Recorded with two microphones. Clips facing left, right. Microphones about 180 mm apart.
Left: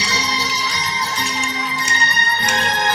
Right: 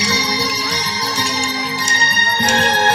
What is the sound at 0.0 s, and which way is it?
Music, 65° right (ahead or behind).